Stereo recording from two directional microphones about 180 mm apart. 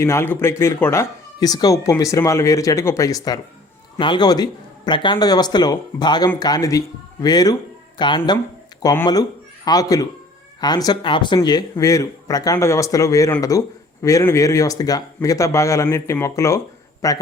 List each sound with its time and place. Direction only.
0.0 s speech: 15° left (ahead or behind)